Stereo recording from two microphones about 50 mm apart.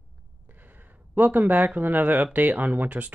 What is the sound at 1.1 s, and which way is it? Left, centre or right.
Speech, right.